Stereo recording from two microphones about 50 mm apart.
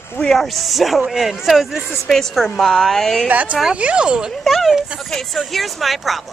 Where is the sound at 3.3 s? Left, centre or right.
Right.